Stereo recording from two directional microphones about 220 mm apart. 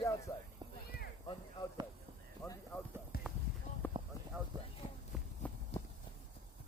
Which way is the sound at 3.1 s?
45° left (ahead or behind).